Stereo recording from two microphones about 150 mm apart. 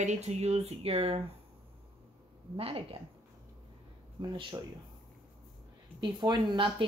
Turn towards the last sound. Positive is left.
turn(degrees=-30)  # may be behind; listen again after turning